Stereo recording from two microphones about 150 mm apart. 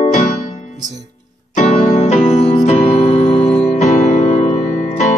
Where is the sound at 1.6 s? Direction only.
45° left (ahead or behind).